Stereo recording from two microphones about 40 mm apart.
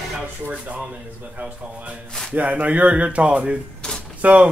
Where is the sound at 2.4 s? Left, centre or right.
Right.